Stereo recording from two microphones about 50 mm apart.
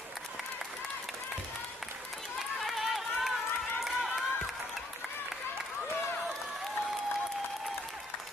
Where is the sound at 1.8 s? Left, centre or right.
Centre.